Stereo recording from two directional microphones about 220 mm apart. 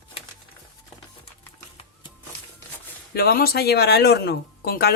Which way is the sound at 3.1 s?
45° left (ahead or behind).